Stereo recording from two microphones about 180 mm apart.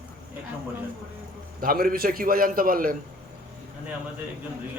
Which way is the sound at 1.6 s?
50° right (ahead or behind).